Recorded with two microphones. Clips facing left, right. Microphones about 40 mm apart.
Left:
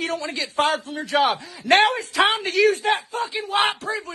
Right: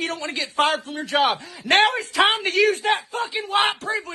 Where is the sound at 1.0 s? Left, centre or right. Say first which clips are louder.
Even; right.